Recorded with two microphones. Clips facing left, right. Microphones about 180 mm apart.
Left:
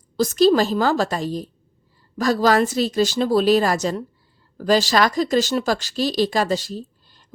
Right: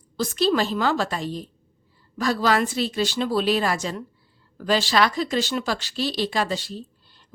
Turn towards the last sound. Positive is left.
turn(degrees=40)  # may be behind; listen again after turning